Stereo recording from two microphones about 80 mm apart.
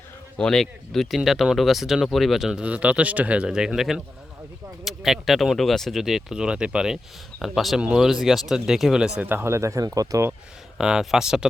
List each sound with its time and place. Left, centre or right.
0.3 s speech: centre
9.2 s speech: right
10.8 s speech: centre